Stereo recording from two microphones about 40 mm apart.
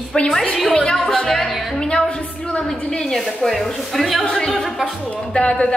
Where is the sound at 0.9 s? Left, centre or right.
Centre.